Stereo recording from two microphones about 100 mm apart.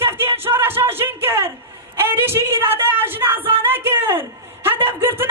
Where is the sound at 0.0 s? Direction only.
20° right (ahead or behind).